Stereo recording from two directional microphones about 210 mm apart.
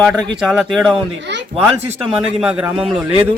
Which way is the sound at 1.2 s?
55° right (ahead or behind).